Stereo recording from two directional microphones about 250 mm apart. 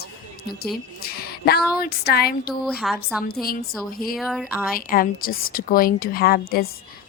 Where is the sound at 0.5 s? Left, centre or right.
Left.